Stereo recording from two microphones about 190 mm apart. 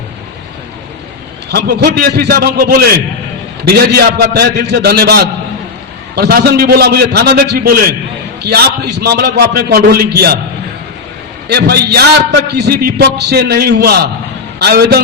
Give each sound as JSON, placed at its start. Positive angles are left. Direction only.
{"t": 1.5, "sound": "a man's voice", "side_deg": -60}
{"t": 11.4, "sound": "a man's voice", "side_deg": -55}